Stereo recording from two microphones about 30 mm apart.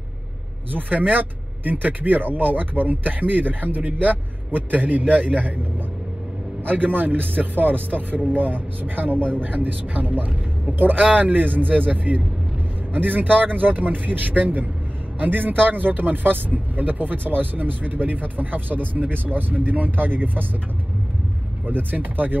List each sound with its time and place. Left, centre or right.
0.7 s speech: right
5.1 s a man's voice: right
6.6 s speech: right
11.0 s speech: right
12.9 s speech: right
15.1 s speech: right
21.6 s speech: right